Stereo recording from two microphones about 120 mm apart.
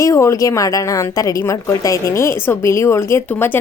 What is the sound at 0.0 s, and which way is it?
A woman's voice, 25° left (ahead or behind).